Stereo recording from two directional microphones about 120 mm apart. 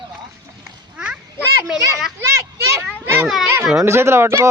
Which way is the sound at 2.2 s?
25° right (ahead or behind).